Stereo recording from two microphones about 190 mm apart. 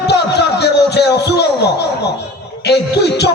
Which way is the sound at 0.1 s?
60° left (ahead or behind).